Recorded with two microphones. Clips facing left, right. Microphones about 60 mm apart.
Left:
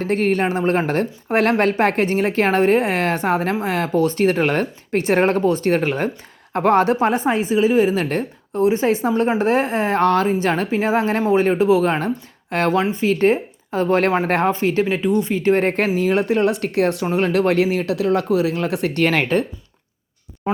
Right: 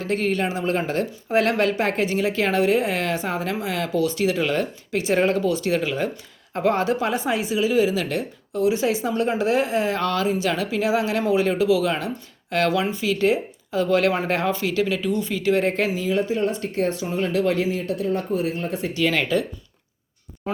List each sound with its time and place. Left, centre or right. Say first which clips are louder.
0.0 s a woman's voice: left 4 dB; left
16.0 s speech: left 5 dB; left